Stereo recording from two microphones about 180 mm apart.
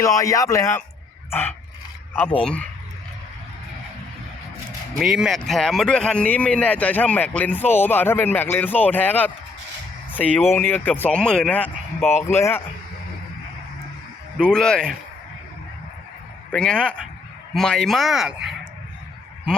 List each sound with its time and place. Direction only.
0.0 s speech: 20° left (ahead or behind)
4.9 s speech: 5° right (ahead or behind)
12.3 s speech: 10° left (ahead or behind)
14.4 s speech: 5° left (ahead or behind)
16.5 s a man's voice: 5° left (ahead or behind)